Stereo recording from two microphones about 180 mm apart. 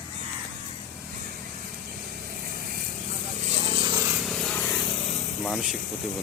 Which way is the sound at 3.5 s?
35° right (ahead or behind).